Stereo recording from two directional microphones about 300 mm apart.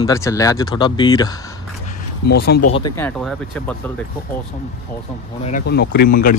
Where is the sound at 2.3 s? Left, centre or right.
Left.